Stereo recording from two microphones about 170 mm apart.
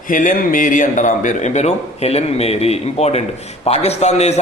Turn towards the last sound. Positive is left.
turn(degrees=40)  # may be behind; listen again after turning